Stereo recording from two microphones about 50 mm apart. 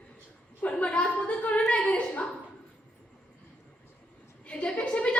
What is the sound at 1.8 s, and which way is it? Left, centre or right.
Dog, left.